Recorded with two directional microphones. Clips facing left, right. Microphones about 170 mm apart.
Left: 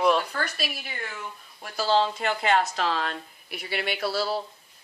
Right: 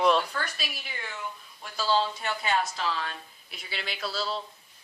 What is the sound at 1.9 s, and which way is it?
Speech, 70° left (ahead or behind).